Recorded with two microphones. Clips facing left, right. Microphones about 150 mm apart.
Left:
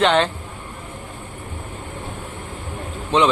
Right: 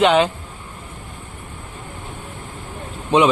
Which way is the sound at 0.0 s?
5° right (ahead or behind).